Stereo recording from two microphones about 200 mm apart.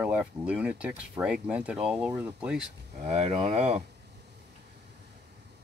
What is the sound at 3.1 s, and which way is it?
Speech, 30° right (ahead or behind).